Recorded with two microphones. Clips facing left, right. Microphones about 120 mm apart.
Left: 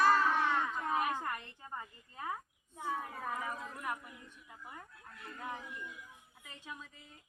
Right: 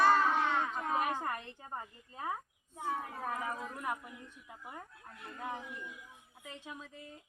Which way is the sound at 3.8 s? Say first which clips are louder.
Right 2 dB; 25° right (ahead or behind).